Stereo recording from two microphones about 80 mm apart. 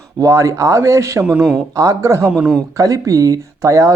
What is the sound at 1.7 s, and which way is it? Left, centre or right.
Speech, right.